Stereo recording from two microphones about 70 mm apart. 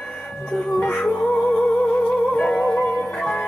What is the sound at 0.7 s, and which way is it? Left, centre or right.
Music, centre.